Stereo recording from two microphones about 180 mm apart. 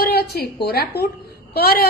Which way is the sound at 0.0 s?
60° left (ahead or behind).